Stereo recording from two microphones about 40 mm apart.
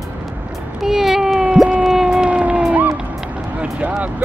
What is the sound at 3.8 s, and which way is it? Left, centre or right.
Speech, right.